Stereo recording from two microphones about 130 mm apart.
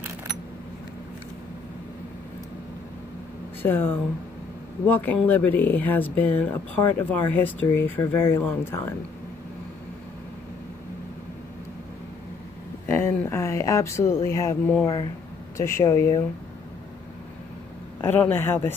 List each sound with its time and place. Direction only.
3.6 s speech: 15° left (ahead or behind)
12.8 s speech: 20° left (ahead or behind)
18.0 s speech: 15° left (ahead or behind)